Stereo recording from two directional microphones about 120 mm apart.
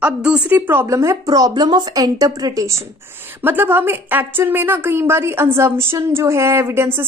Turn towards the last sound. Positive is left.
turn(degrees=-20)  # may be behind; listen again after turning